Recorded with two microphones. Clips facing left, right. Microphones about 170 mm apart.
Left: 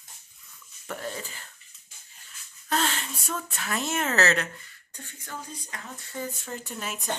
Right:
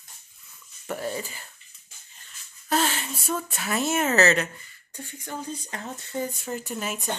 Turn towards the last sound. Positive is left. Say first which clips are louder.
# right 4 dB
turn(degrees=-5)  # may be behind; listen again after turning